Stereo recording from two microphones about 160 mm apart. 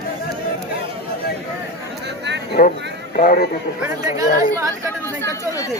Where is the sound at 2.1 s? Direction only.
90° right.